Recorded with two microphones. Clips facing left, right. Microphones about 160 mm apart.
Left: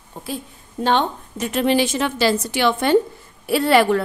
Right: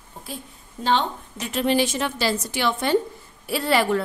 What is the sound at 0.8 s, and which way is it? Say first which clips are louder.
Speech: left 3 dB; 55° left (ahead or behind).